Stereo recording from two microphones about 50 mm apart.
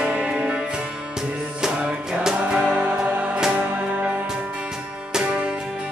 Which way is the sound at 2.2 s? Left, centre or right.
Centre.